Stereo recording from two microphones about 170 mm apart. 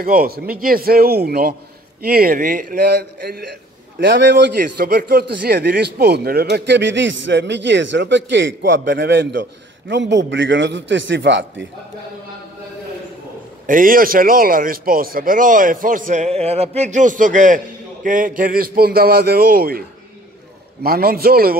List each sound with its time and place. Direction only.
0.0 s a man's voice: 60° right (ahead or behind)
4.0 s speech: 90° right
4.6 s speech: 60° right (ahead or behind); by 11.6 s 90° right
13.7 s a man's voice: 55° right (ahead or behind)
20.8 s a man's voice: 60° right (ahead or behind)